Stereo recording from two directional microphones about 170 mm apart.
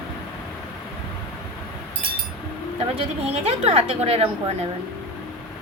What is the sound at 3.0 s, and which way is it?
A woman's voice, 35° right (ahead or behind).